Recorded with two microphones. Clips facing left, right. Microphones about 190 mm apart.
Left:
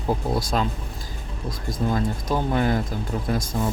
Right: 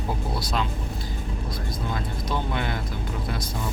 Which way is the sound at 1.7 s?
40° left (ahead or behind).